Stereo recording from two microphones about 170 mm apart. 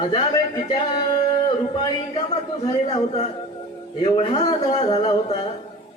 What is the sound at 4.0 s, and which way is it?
Speech, 30° left (ahead or behind).